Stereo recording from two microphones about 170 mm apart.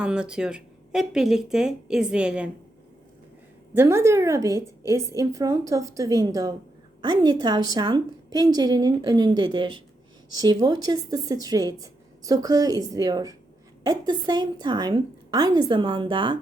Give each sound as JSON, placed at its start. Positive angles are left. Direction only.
{"t": 0.0, "sound": "speech", "side_deg": -5}
{"t": 3.8, "sound": "a woman's voice", "side_deg": -15}